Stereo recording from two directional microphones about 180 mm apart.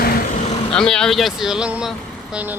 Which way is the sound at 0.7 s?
5° left (ahead or behind).